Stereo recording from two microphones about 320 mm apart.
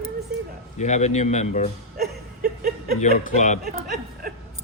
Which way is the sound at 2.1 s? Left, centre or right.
Right.